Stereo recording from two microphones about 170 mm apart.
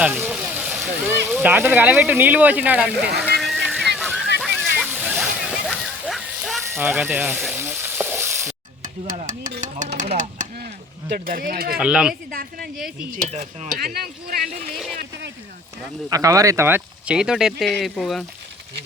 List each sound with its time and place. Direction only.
0.0 s speech: 10° right (ahead or behind)
3.2 s music: centre (ahead or behind)
3.9 s a sound: centre (ahead or behind)
4.5 s splash: 10° right (ahead or behind)
6.6 s speech: 15° right (ahead or behind)
7.4 s frying: 10° right (ahead or behind)
8.8 s speech: 50° right (ahead or behind)
10.2 s a sound: 50° right (ahead or behind)
11.1 s speech: 60° right (ahead or behind)
11.8 s speech: 5° right (ahead or behind)
12.3 s speech: 55° right (ahead or behind)
13.1 s speech: 40° right (ahead or behind)
13.7 s speech: 65° right (ahead or behind)
16.0 s speech: 20° right (ahead or behind); by 18.3 s centre (ahead or behind)